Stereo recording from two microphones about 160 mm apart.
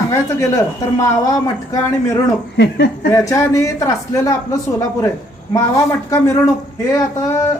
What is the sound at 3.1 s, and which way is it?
A woman's voice, 20° left (ahead or behind).